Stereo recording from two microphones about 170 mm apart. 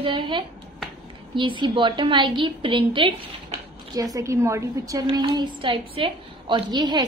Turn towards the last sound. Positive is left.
turn(degrees=-25)  # may be behind; listen again after turning